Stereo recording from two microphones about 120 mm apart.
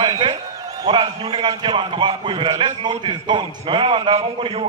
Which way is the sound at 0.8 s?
40° right (ahead or behind).